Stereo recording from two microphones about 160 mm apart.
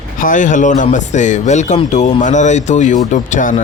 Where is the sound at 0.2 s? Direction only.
55° left (ahead or behind).